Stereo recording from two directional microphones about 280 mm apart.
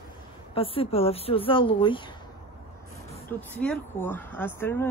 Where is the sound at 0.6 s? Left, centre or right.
Centre.